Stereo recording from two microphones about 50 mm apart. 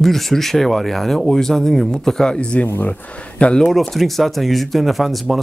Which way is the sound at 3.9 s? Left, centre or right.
Centre.